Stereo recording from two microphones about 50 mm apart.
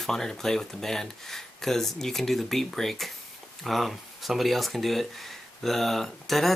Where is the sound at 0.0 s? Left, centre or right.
Centre.